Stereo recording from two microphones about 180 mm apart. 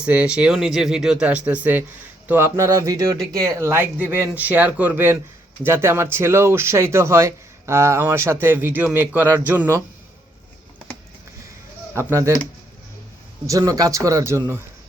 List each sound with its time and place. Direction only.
0.0 s speech: 5° right (ahead or behind)
11.9 s speech: 15° right (ahead or behind)
13.5 s speech: 20° right (ahead or behind)